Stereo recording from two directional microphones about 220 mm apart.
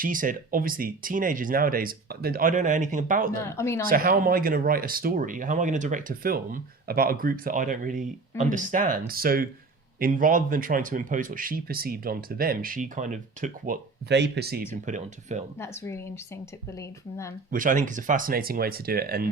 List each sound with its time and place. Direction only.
0.0 s speech: 40° right (ahead or behind)
3.4 s speech: 10° left (ahead or behind)
3.8 s speech: 40° right (ahead or behind)
14.1 s speech: 50° right (ahead or behind)
14.8 s speech: 35° right (ahead or behind)
15.5 s speech: 10° left (ahead or behind)
17.5 s speech: 35° right (ahead or behind)